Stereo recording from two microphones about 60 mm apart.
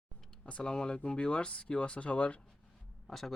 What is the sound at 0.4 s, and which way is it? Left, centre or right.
Speech, centre.